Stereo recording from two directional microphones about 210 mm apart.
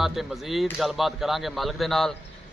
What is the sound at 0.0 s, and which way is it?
Speech, centre (ahead or behind).